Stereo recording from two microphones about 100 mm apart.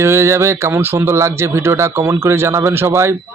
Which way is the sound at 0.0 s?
25° right (ahead or behind).